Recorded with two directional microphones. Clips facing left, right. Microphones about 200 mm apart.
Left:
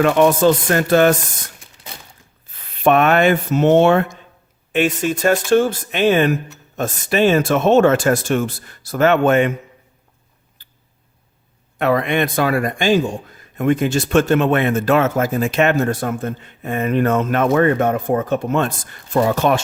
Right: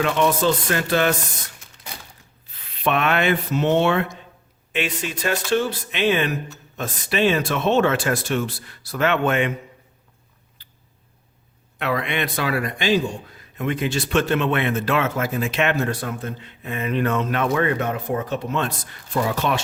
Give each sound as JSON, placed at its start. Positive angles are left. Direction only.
{"t": 0.0, "sound": "speech", "side_deg": 50}
{"t": 2.5, "sound": "speech", "side_deg": 45}
{"t": 11.8, "sound": "speech", "side_deg": 45}